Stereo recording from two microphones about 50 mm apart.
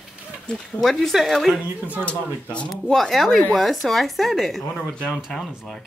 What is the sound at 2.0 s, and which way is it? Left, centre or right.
Speech, left.